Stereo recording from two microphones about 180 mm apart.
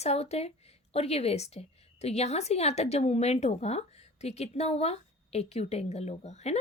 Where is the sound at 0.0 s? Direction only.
35° left (ahead or behind).